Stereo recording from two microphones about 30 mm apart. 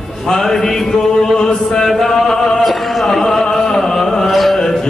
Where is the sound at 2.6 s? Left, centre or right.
Centre.